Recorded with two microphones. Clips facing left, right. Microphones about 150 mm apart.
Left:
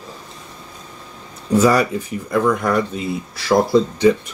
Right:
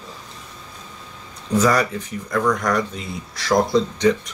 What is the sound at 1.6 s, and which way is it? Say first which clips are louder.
Speech: left 3 dB; 10° left (ahead or behind).